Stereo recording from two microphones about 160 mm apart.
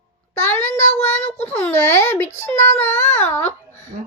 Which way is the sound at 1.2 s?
45° left (ahead or behind).